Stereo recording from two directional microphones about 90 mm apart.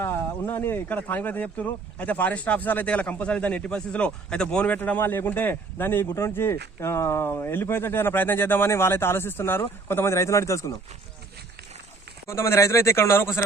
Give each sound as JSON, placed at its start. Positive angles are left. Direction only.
{"t": 0.0, "sound": "speech", "side_deg": 25}
{"t": 12.3, "sound": "speech", "side_deg": 30}